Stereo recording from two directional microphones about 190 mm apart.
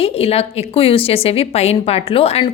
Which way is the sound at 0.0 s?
30° left (ahead or behind).